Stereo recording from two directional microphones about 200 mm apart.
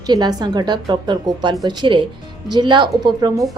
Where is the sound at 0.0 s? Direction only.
20° right (ahead or behind).